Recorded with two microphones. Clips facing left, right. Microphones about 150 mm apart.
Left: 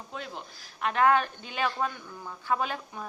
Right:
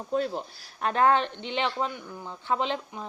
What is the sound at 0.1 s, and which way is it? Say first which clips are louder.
A woman's voice: right 13 dB; 40° right (ahead or behind).